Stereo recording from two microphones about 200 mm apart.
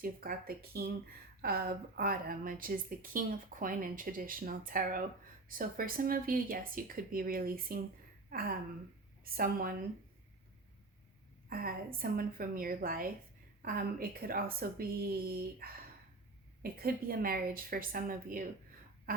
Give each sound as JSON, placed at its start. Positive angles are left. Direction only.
{"t": 0.0, "sound": "a woman's voice", "side_deg": -45}
{"t": 11.4, "sound": "a woman's voice", "side_deg": -45}
{"t": 19.1, "sound": "a sound", "side_deg": -45}